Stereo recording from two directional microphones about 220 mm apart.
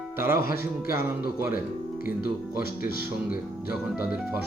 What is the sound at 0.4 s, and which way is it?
Speech, 40° left (ahead or behind).